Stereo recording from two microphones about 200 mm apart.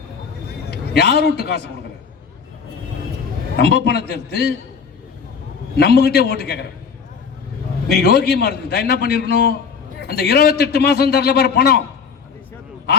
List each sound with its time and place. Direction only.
0.7 s a sound: 50° left (ahead or behind)
1.2 s a man's voice: 50° left (ahead or behind)
3.6 s a man's voice: 50° left (ahead or behind)
5.7 s a man's voice: 50° left (ahead or behind)
7.9 s a man's voice: 50° left (ahead or behind)